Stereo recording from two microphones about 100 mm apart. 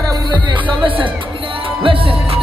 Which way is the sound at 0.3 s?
60° right (ahead or behind).